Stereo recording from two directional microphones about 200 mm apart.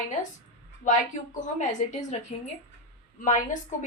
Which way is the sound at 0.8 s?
40° left (ahead or behind).